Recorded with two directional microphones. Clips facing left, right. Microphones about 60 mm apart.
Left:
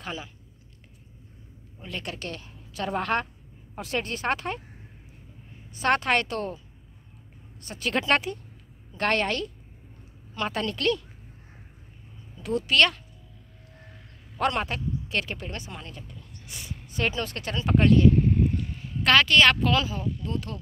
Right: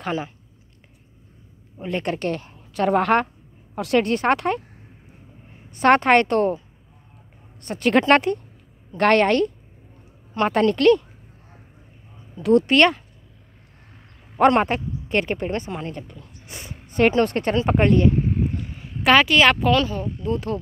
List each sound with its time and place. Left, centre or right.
0.0 s speech: right
1.8 s a woman's voice: right
3.7 s speech: right
5.8 s a woman's voice: right
7.6 s a woman's voice: right
12.6 s speech: right
14.3 s speech: right
15.9 s a woman's voice: right
16.4 s a sound: right
16.8 s speech: right
17.6 s speech: right
18.1 s a sound: centre
19.7 s speech: centre
20.1 s speech: right